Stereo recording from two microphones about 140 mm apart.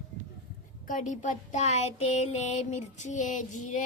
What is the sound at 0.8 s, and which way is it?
A child's voice, 65° left (ahead or behind).